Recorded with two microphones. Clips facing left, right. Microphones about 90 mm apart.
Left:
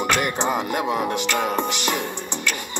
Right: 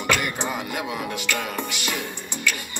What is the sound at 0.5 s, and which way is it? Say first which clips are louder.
Music: left 6 dB; 40° left (ahead or behind).